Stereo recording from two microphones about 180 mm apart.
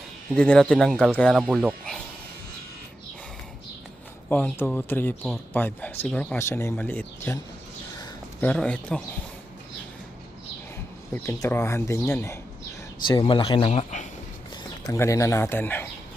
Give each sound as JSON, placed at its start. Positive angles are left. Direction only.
{"t": 0.3, "sound": "speech", "side_deg": 5}
{"t": 4.3, "sound": "speech", "side_deg": 10}
{"t": 8.4, "sound": "speech", "side_deg": 10}
{"t": 11.1, "sound": "speech", "side_deg": 10}
{"t": 13.1, "sound": "speech", "side_deg": 25}
{"t": 14.5, "sound": "speech", "side_deg": 15}